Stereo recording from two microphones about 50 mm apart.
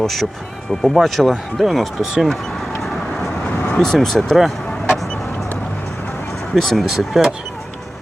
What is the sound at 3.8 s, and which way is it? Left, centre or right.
Speech, centre.